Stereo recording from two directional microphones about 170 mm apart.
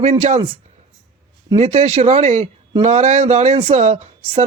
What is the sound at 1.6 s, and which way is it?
Speech, 40° right (ahead or behind).